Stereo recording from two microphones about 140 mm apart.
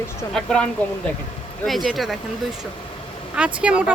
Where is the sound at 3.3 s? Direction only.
10° right (ahead or behind).